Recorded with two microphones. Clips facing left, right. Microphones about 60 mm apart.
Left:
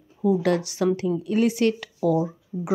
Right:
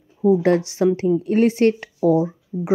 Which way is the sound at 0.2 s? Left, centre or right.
Right.